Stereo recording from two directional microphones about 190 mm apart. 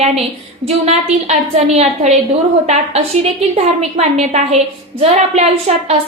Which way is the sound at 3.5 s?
35° right (ahead or behind).